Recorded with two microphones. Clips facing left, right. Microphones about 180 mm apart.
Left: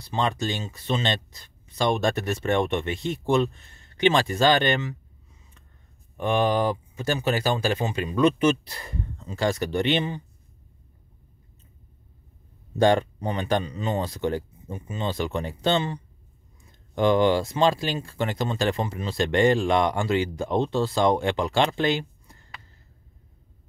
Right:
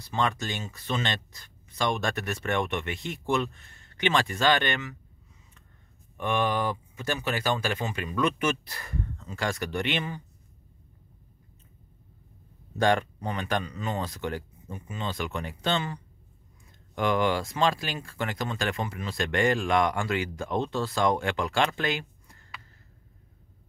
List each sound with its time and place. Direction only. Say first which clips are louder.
0.0 s speech: left 3 dB; 30° left (ahead or behind)
6.1 s speech: left 5 dB; 30° left (ahead or behind)
12.7 s speech: left 4 dB; 30° left (ahead or behind)